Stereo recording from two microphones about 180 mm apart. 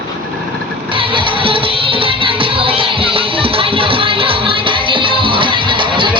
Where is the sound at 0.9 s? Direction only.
30° right (ahead or behind).